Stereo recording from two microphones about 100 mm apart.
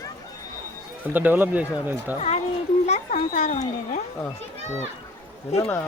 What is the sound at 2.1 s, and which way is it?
Speech, 90° left.